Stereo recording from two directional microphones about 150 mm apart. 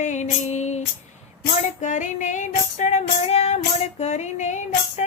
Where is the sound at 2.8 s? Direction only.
50° left (ahead or behind).